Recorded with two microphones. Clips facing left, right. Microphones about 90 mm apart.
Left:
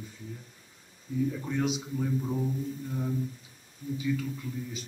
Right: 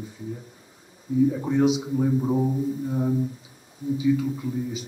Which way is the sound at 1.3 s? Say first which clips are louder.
Right 8 dB; 25° right (ahead or behind).